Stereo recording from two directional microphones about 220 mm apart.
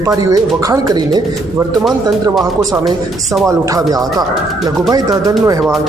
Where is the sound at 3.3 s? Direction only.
5° right (ahead or behind).